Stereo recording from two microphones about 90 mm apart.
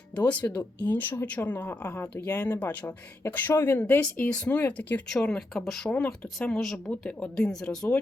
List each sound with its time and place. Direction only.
0.2 s speech: 15° left (ahead or behind)